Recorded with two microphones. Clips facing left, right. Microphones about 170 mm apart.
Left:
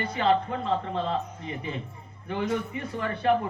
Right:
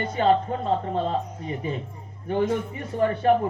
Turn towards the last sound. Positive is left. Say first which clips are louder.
# right 5 dB
turn(degrees=-40)  # may be behind; listen again after turning